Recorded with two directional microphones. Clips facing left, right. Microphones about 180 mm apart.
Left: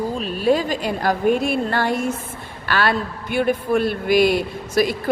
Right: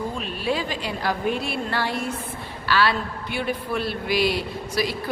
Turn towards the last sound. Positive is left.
turn(degrees=50)  # may be behind; listen again after turning